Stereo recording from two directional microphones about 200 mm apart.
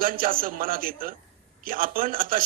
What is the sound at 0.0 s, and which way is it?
A man's voice, 45° right (ahead or behind).